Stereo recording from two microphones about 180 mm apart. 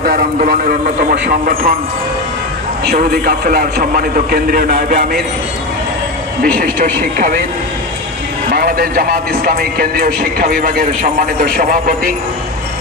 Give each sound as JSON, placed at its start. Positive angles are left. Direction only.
{"t": 0.0, "sound": "a man's voice", "side_deg": -55}
{"t": 2.9, "sound": "a man's voice", "side_deg": -60}
{"t": 6.6, "sound": "a man's voice", "side_deg": -50}
{"t": 8.5, "sound": "a man's voice", "side_deg": -60}